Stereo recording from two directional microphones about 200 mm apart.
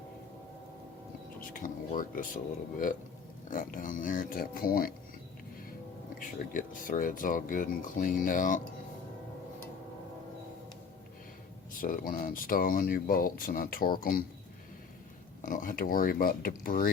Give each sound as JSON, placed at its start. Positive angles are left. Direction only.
{"t": 1.5, "sound": "speech", "side_deg": 40}
{"t": 3.5, "sound": "speech", "side_deg": 45}
{"t": 6.1, "sound": "speech", "side_deg": 45}
{"t": 11.8, "sound": "speech", "side_deg": 45}
{"t": 15.4, "sound": "speech", "side_deg": 40}